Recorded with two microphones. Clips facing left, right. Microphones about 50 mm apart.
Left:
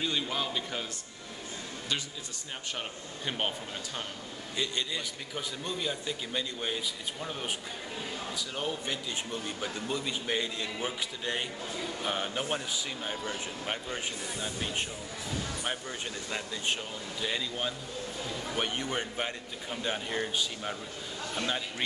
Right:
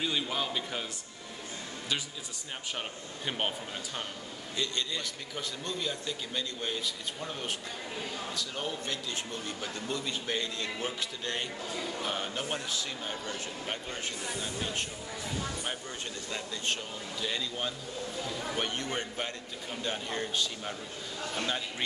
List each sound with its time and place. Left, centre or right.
0.0 s a man's voice: centre
3.3 s speech: centre
4.6 s a man's voice: centre
16.3 s a man's voice: centre